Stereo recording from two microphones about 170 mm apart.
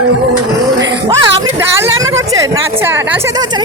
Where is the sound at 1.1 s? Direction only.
15° right (ahead or behind).